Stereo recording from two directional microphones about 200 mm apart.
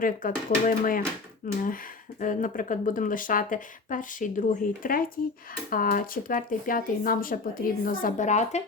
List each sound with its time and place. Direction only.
0.0 s speech: 45° left (ahead or behind)